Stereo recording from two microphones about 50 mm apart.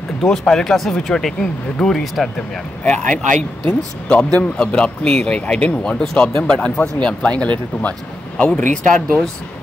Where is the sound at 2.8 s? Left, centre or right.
Left.